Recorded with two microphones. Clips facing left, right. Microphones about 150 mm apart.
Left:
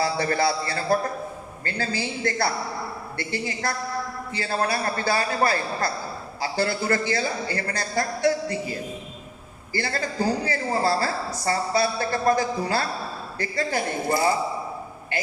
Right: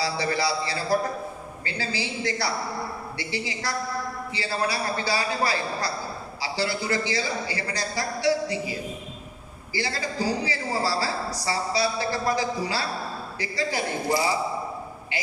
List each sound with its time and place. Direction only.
0.0 s a man's voice: 50° left (ahead or behind)